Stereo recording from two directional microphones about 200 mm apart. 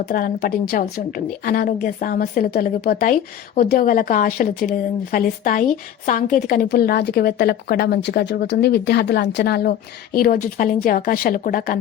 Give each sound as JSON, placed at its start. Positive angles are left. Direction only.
{"t": 0.0, "sound": "a woman's voice", "side_deg": 45}